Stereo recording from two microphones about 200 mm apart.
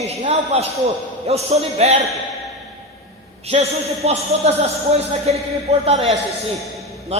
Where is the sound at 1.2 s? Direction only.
30° right (ahead or behind).